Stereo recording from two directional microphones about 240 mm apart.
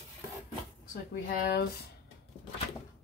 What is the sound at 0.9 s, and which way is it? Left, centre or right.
Speech, left.